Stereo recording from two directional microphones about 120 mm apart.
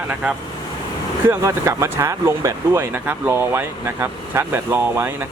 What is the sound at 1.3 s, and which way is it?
Speech, 25° right (ahead or behind).